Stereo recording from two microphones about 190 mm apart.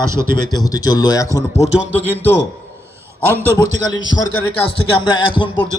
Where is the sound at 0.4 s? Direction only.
20° left (ahead or behind).